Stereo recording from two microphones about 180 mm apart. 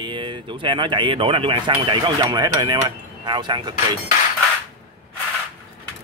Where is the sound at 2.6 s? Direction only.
25° right (ahead or behind).